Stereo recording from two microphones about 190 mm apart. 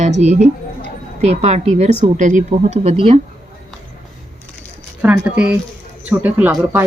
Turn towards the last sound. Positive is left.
turn(degrees=-10)  # may be behind; listen again after turning